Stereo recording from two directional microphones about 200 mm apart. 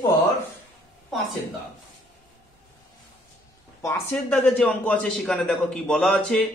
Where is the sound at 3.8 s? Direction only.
10° left (ahead or behind).